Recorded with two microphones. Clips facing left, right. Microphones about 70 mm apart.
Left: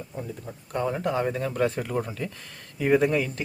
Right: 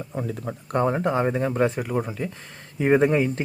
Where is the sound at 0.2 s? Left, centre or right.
Right.